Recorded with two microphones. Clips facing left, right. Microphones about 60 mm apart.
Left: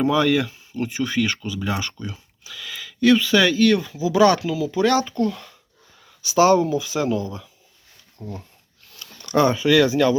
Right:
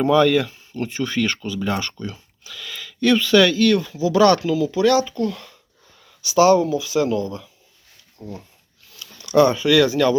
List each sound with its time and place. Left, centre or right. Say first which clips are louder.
0.0 s speech: right 3 dB; centre
4.8 s speech: even; left
5.3 s speech: right 1 dB; centre
6.2 s speech: right 1 dB; left; by 8.3 s centre
8.9 s a sound: even; left
9.4 s speech: right 2 dB; left